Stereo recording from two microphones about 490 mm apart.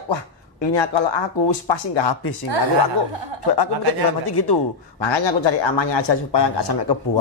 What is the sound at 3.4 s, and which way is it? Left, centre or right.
Speech, left.